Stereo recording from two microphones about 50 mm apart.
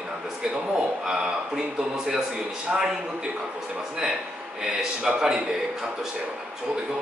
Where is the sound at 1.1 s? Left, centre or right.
Centre.